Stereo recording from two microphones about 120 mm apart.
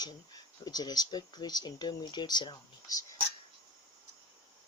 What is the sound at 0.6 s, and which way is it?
Speech, 35° left (ahead or behind).